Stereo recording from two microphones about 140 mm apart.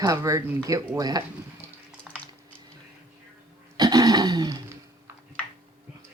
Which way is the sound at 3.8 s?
25° right (ahead or behind).